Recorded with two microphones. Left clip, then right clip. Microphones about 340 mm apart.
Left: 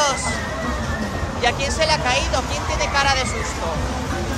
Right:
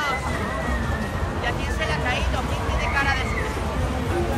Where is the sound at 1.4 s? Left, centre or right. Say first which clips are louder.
Left 8 dB; centre.